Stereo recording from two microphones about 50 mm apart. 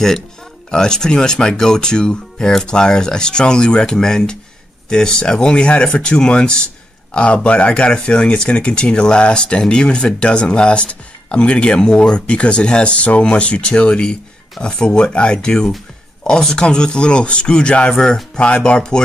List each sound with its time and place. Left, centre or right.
0.7 s speech: centre